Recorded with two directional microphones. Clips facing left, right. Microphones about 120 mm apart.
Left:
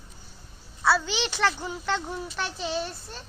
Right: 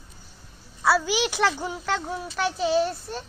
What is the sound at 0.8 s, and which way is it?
A child's voice, 10° right (ahead or behind).